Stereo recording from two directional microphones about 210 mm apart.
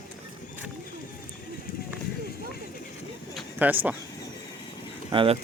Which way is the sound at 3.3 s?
10° right (ahead or behind).